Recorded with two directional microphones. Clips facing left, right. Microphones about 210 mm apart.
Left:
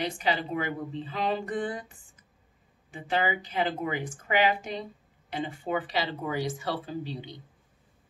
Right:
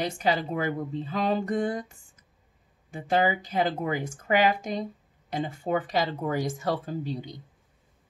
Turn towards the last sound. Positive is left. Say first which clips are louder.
# right 3 dB
turn(degrees=-45)  # may be behind; listen again after turning